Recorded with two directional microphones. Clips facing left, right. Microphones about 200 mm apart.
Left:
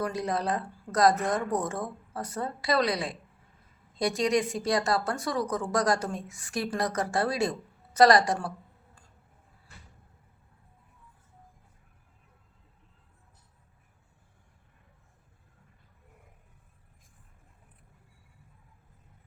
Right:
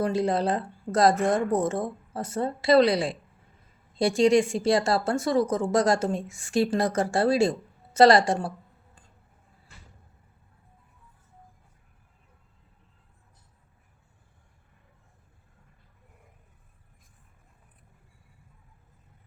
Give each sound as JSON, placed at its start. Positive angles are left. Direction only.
{"t": 0.0, "sound": "speech", "side_deg": -30}